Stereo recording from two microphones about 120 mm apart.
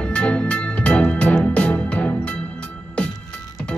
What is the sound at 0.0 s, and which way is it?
Music, 10° left (ahead or behind).